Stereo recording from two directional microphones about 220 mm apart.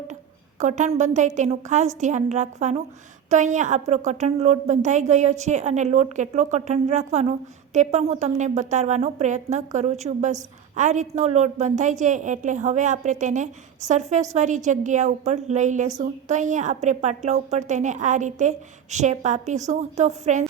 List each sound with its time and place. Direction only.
0.6 s a woman's voice: 35° right (ahead or behind)